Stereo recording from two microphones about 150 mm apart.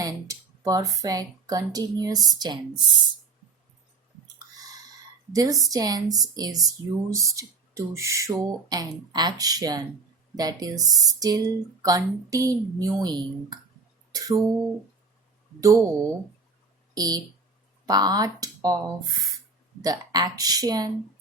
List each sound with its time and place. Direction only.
0.0 s speech: 25° right (ahead or behind)
5.3 s speech: 25° right (ahead or behind)
14.1 s a sound: 25° right (ahead or behind)
15.6 s speech: 20° right (ahead or behind)
16.9 s speech: 25° right (ahead or behind)
19.8 s speech: 25° right (ahead or behind)